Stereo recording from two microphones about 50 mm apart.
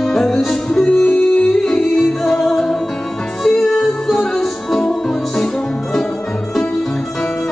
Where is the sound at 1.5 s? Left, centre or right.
Centre.